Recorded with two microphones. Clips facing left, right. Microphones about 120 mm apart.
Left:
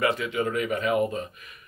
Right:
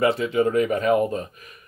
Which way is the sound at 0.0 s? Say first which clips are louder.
Right 5 dB; 35° right (ahead or behind).